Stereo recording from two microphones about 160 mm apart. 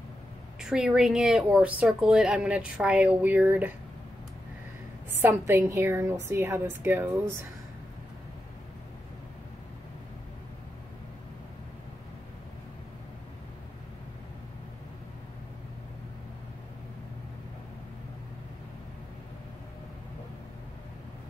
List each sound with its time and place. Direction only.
0.6 s a woman's voice: 5° right (ahead or behind)
5.1 s a woman's voice: 15° right (ahead or behind)